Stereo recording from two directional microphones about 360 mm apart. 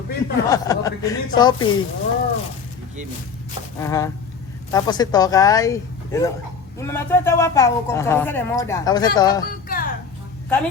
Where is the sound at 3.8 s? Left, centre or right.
Centre.